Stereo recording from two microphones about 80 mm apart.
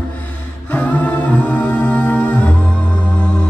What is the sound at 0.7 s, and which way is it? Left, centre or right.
Humming, centre.